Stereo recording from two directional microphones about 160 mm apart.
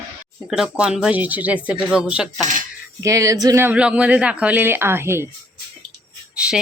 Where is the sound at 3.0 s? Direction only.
20° right (ahead or behind).